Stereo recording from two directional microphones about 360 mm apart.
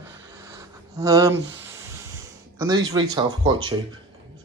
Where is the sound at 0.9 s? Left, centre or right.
Centre.